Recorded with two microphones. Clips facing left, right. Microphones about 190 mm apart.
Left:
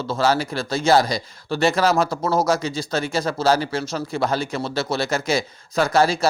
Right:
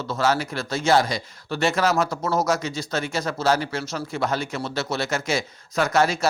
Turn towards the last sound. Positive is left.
turn(degrees=35)  # may be behind; listen again after turning